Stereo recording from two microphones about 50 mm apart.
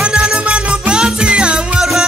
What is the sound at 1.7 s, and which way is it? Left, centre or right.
Music, centre.